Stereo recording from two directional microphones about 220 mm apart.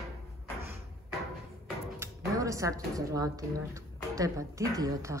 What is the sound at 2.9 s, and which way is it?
A woman's voice, 15° right (ahead or behind).